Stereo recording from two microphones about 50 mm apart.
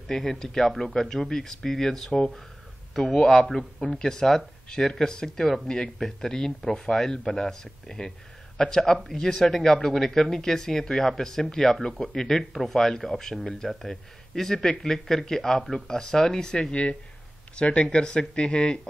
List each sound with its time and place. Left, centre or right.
0.1 s speech: centre